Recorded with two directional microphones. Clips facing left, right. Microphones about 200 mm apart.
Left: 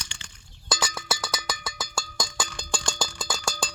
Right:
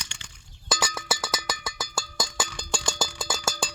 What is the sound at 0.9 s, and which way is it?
Cowbell, centre (ahead or behind).